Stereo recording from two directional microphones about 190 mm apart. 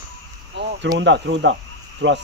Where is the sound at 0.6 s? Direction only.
70° right (ahead or behind).